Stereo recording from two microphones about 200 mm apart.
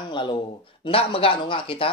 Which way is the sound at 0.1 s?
25° left (ahead or behind).